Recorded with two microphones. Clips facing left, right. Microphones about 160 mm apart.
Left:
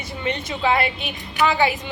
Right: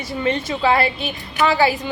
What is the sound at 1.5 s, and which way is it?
Speech, 35° right (ahead or behind).